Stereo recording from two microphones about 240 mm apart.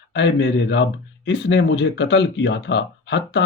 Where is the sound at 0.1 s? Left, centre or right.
Left.